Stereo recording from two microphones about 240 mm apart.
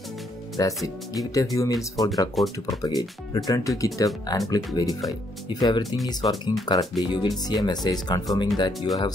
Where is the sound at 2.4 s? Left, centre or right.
Centre.